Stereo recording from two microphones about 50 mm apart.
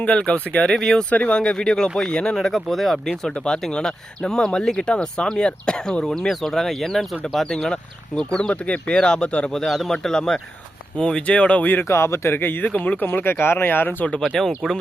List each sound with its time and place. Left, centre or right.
0.0 s speech: left
0.7 s speech: centre
1.1 s speech: left
1.4 s speech: centre
3.2 s a man's voice: centre
11.6 s speech: left
11.9 s speech: left
12.6 s speech: left
13.1 s speech: left
14.3 s speech: centre